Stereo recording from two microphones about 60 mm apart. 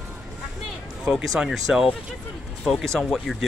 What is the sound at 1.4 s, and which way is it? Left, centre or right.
Speech, centre.